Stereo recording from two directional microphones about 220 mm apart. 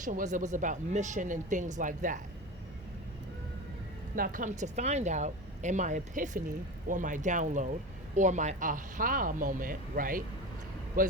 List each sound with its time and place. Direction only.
0.0 s a woman's voice: 35° right (ahead or behind)
4.1 s a woman's voice: 40° right (ahead or behind)